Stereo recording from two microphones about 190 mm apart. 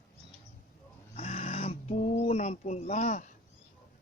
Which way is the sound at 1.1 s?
30° left (ahead or behind).